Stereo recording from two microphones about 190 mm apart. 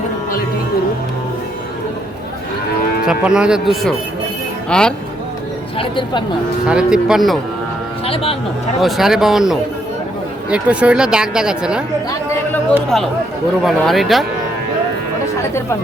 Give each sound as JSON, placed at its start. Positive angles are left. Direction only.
{"t": 3.1, "sound": "speech", "side_deg": -5}
{"t": 5.7, "sound": "speech", "side_deg": 25}
{"t": 6.7, "sound": "speech", "side_deg": -5}
{"t": 8.0, "sound": "speech", "side_deg": 30}
{"t": 8.8, "sound": "speech", "side_deg": 0}
{"t": 12.9, "sound": "speech", "side_deg": 0}